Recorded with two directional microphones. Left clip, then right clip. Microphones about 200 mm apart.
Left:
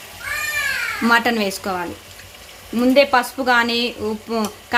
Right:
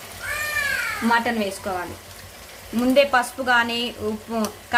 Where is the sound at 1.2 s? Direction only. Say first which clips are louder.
Left 4 dB; 50° left (ahead or behind).